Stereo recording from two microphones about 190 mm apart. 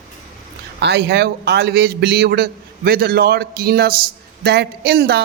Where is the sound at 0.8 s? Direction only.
60° right (ahead or behind).